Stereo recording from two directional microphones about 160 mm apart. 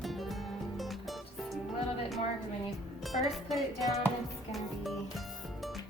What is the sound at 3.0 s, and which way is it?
Speech, centre (ahead or behind).